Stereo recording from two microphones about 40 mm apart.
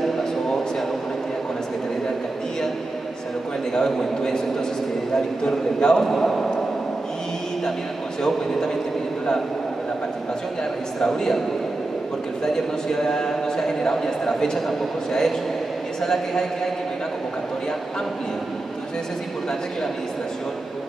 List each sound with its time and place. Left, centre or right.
0.2 s a sound: centre
3.7 s a man's voice: centre
8.2 s a man's voice: centre
11.0 s a man's voice: centre
12.5 s a man's voice: centre